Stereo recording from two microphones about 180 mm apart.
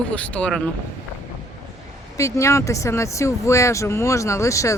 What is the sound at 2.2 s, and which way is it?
Speech, 15° left (ahead or behind).